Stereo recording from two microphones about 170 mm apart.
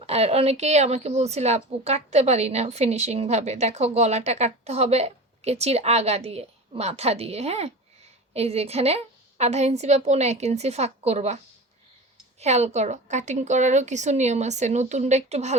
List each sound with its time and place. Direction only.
0.0 s a woman's voice: 35° right (ahead or behind)
12.4 s a woman's voice: 40° right (ahead or behind)